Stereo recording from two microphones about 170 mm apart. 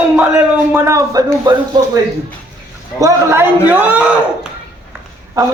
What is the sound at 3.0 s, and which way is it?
A man's voice, 15° right (ahead or behind).